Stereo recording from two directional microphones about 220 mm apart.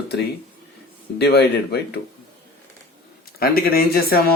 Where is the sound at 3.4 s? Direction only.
45° left (ahead or behind).